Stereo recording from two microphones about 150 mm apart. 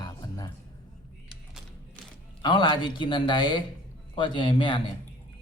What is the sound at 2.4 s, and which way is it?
Speech, 30° left (ahead or behind).